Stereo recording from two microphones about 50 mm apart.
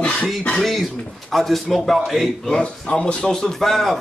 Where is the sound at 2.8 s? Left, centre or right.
Centre.